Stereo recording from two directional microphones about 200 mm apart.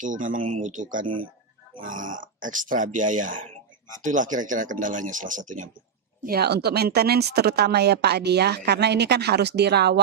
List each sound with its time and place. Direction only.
0.0 s speech: 40° right (ahead or behind)
6.2 s speech: 50° right (ahead or behind)